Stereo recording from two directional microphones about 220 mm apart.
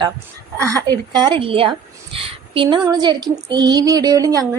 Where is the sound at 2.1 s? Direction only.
25° right (ahead or behind).